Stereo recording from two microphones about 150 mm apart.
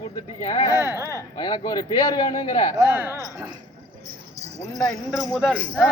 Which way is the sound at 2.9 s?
15° right (ahead or behind).